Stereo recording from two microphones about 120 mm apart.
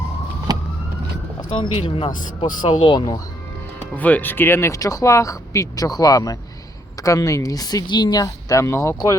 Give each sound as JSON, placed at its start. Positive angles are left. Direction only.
{"t": 0.5, "sound": "vehicle", "side_deg": -30}
{"t": 1.4, "sound": "speech", "side_deg": 40}
{"t": 3.9, "sound": "speech", "side_deg": 15}